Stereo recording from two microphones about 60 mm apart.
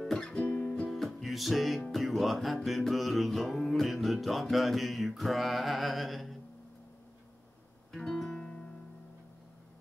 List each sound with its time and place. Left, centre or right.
0.0 s music: centre
0.8 s music: centre
7.9 s guitar: centre